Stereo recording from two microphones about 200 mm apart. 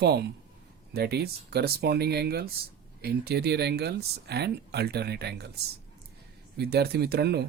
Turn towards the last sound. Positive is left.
turn(degrees=-55)  # may be behind; listen again after turning